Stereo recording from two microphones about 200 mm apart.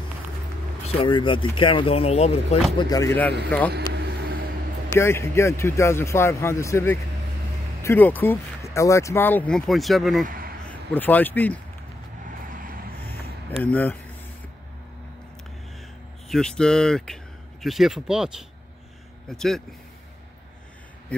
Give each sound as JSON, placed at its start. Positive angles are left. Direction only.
{"t": 0.9, "sound": "speech", "side_deg": 25}
{"t": 2.9, "sound": "speech", "side_deg": 15}
{"t": 3.9, "sound": "vehicle", "side_deg": -50}
{"t": 4.9, "sound": "speech", "side_deg": 10}
{"t": 10.2, "sound": "a sound", "side_deg": -45}
{"t": 10.6, "sound": "speech", "side_deg": 5}
{"t": 12.4, "sound": "vehicle", "side_deg": -45}
{"t": 13.7, "sound": "speech", "side_deg": 10}
{"t": 16.3, "sound": "speech", "side_deg": 5}